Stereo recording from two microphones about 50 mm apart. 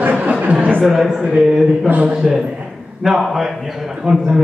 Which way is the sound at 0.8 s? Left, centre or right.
Centre.